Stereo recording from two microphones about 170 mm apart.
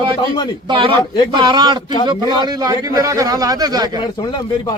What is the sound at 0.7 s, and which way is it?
A man's voice, 30° right (ahead or behind).